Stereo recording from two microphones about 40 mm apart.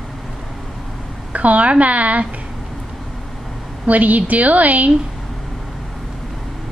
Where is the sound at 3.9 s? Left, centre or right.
Right.